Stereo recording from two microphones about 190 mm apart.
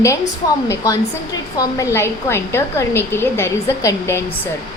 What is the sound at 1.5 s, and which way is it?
A woman's voice, 15° left (ahead or behind).